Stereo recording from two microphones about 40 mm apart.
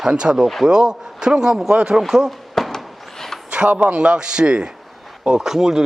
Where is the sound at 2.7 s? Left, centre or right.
Centre.